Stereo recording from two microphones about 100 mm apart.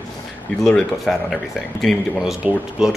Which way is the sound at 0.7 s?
5° left (ahead or behind).